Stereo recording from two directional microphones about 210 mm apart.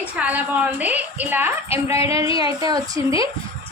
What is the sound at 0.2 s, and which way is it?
A woman's voice, 5° right (ahead or behind).